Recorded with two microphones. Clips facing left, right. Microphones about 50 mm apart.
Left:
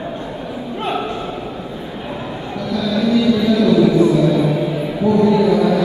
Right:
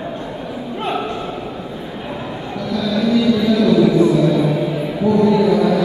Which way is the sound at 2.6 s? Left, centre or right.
Left.